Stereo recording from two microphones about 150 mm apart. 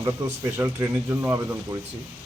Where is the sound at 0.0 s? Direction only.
15° right (ahead or behind).